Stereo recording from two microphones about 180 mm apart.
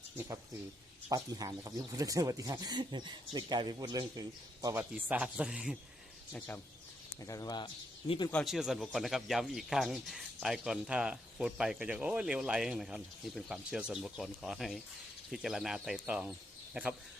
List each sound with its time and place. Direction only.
1.1 s a man's voice: 20° right (ahead or behind); by 5.7 s 5° right (ahead or behind)
7.2 s a man's voice: 20° left (ahead or behind)
8.3 s a man's voice: centre (ahead or behind)